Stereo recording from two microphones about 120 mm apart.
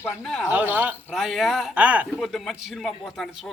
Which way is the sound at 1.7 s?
10° right (ahead or behind).